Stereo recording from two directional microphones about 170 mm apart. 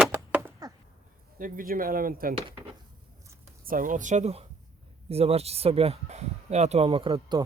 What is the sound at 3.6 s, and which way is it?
Speech, 55° right (ahead or behind).